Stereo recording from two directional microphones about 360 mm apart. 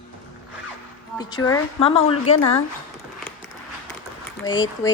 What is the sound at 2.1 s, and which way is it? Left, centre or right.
Speech, left.